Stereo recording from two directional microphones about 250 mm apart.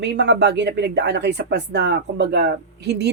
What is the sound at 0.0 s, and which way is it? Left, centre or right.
Speech, right.